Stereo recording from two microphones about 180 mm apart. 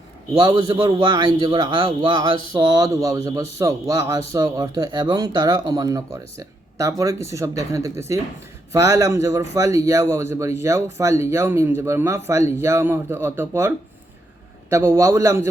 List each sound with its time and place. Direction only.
0.3 s a man's voice: 25° right (ahead or behind)